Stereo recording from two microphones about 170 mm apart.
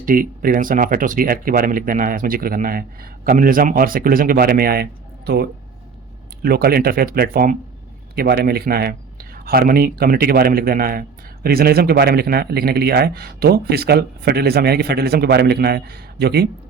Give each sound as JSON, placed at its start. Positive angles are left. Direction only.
{"t": 0.0, "sound": "speech", "side_deg": -55}